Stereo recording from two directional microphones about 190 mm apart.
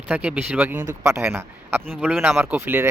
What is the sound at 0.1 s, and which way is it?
Speech, 5° right (ahead or behind).